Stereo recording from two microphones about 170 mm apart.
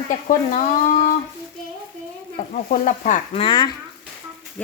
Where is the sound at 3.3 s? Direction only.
30° left (ahead or behind).